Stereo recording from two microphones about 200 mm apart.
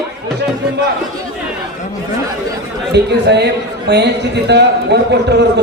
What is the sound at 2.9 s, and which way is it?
A man's voice, 55° right (ahead or behind).